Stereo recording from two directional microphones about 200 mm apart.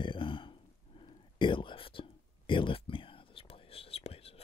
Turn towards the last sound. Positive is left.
turn(degrees=30)  # may be behind; listen again after turning